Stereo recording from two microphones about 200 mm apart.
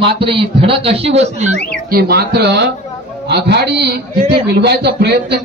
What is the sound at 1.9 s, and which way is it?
A man's voice, 50° right (ahead or behind).